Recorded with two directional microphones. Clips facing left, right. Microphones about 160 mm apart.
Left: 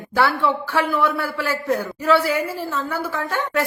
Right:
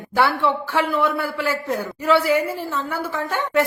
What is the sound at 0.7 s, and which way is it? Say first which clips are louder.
Speech: left 1 dB; 20° right (ahead or behind).